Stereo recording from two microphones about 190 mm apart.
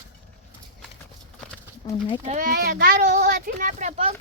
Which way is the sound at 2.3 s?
45° right (ahead or behind).